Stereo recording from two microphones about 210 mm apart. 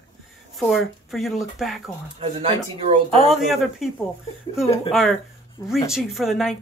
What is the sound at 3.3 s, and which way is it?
Speech, centre (ahead or behind).